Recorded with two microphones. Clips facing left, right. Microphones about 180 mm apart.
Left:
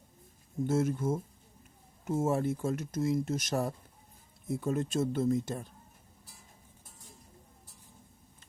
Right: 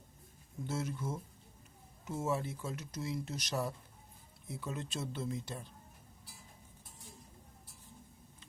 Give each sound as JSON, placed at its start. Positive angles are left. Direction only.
{"t": 0.7, "sound": "speech", "side_deg": 50}